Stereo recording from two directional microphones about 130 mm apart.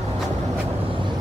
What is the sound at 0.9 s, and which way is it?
Vehicle, 40° right (ahead or behind).